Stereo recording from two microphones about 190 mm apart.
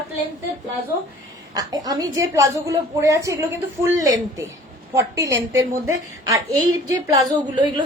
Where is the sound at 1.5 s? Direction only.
20° right (ahead or behind).